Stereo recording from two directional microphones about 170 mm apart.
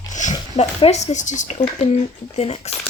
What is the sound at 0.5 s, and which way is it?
Speech, 40° left (ahead or behind).